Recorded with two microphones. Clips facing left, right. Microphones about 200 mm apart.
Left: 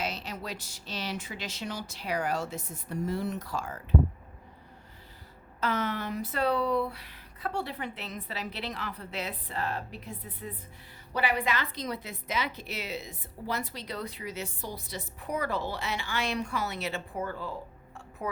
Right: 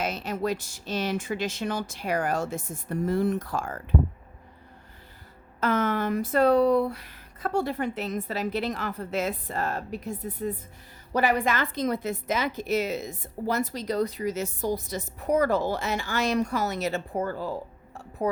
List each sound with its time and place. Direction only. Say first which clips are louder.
0.0 s a woman's voice: right 7 dB; 50° right (ahead or behind)
5.5 s a woman's voice: right 6 dB; 50° right (ahead or behind)